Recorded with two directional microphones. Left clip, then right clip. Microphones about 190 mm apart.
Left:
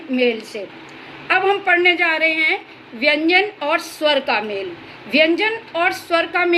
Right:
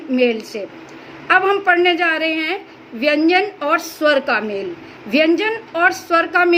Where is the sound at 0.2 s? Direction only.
55° right (ahead or behind).